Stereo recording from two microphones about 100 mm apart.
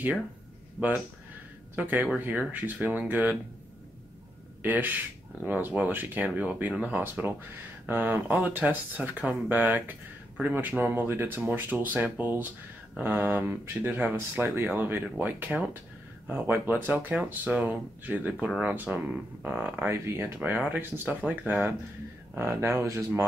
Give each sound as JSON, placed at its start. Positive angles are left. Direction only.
{"t": 0.7, "sound": "speech", "side_deg": -15}
{"t": 4.6, "sound": "speech", "side_deg": -20}
{"t": 22.4, "sound": "speech", "side_deg": -25}